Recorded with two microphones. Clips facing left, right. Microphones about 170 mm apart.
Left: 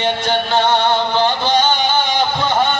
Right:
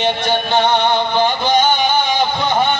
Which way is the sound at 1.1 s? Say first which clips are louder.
Right 1 dB; 15° right (ahead or behind).